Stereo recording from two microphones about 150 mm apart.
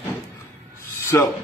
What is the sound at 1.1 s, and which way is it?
Speech, 15° left (ahead or behind).